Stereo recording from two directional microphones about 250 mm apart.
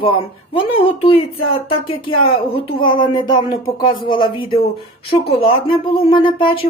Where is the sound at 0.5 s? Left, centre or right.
Left.